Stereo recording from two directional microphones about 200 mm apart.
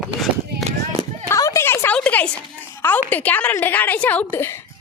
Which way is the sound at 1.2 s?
15° left (ahead or behind).